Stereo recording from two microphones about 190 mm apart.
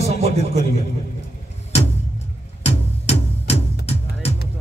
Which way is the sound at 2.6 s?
35° left (ahead or behind).